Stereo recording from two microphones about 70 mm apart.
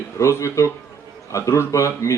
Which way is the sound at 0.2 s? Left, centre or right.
Left.